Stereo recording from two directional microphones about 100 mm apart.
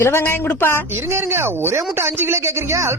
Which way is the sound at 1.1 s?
25° right (ahead or behind).